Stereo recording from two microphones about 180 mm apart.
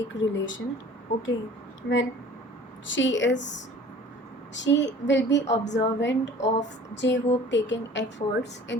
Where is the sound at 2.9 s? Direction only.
90° left.